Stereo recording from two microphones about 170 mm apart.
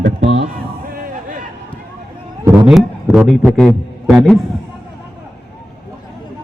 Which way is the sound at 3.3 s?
5° left (ahead or behind).